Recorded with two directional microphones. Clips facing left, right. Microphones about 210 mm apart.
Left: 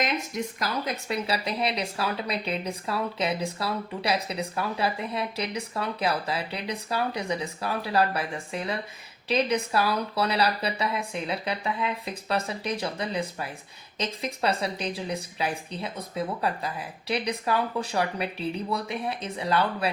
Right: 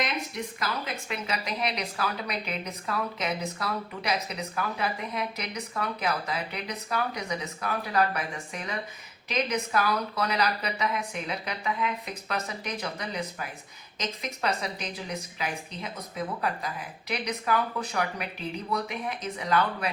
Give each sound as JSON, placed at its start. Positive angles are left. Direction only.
{"t": 1.0, "sound": "a woman's voice", "side_deg": 35}